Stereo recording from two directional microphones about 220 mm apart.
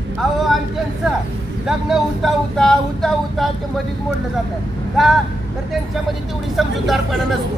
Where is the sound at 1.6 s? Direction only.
Centre (ahead or behind).